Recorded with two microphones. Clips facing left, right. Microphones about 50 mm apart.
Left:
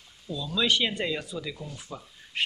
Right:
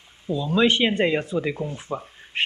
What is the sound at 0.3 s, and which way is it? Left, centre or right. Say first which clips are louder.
Speech: right 7 dB; right.